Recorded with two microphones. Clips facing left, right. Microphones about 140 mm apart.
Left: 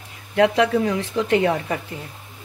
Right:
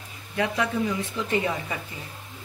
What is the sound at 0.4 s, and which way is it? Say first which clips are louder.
Speech: left 8 dB; 70° left (ahead or behind).